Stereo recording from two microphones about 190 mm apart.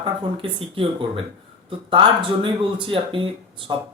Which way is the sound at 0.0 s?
25° right (ahead or behind).